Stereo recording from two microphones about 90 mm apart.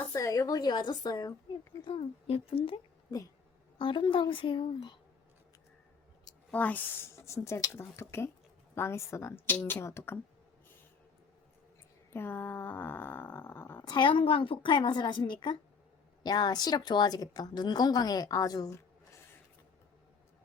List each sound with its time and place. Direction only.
0.0 s a woman's voice: 35° left (ahead or behind)
1.8 s a woman's voice: 90° left
3.1 s speech: 40° left (ahead or behind)
3.8 s a woman's voice: 70° left (ahead or behind)
6.5 s speech: 15° left (ahead or behind)
7.2 s speech: 30° left (ahead or behind)
12.1 s speech: 25° left (ahead or behind)
13.8 s a woman's voice: 60° left (ahead or behind); by 19.2 s 40° left (ahead or behind)